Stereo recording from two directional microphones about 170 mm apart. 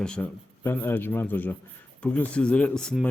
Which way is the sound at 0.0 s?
5° left (ahead or behind).